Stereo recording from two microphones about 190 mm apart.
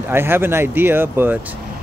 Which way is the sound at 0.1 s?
10° right (ahead or behind).